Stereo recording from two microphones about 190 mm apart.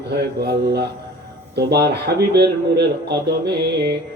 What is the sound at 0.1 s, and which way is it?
Speech, 60° right (ahead or behind).